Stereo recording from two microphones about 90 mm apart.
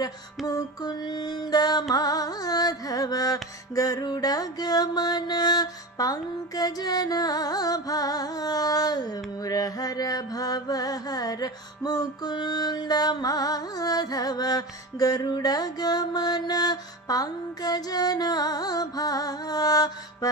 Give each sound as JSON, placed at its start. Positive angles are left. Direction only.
{"t": 0.5, "sound": "mantra", "side_deg": 45}